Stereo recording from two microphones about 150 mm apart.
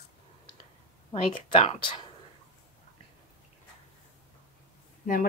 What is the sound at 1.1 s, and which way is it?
Speech, 40° left (ahead or behind).